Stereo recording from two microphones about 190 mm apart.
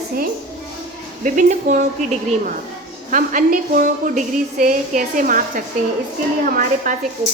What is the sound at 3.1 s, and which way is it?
A woman's voice, 45° right (ahead or behind).